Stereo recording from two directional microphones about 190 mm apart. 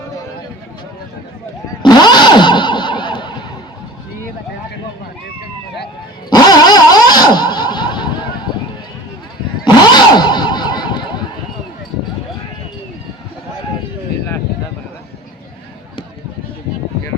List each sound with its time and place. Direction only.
1.8 s vehicle: 25° left (ahead or behind)
6.3 s vehicle: 20° left (ahead or behind)
9.6 s a sound: 25° left (ahead or behind)